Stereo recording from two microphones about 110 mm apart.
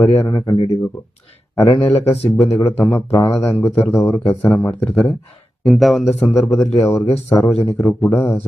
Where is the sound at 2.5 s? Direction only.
20° left (ahead or behind).